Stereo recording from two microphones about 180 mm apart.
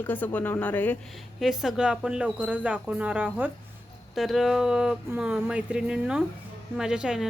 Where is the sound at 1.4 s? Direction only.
Centre (ahead or behind).